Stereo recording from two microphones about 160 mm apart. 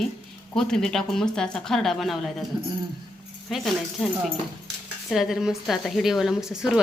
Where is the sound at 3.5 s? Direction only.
Centre (ahead or behind).